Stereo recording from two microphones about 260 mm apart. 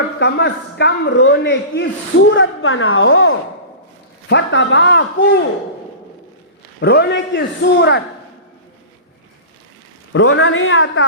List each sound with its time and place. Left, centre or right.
0.2 s a man's voice: left
6.7 s a man's voice: left
10.1 s a man's voice: left